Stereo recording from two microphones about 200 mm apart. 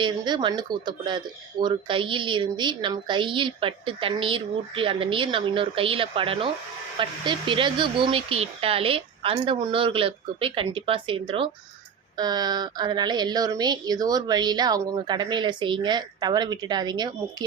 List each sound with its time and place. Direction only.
0.0 s speech: 20° right (ahead or behind)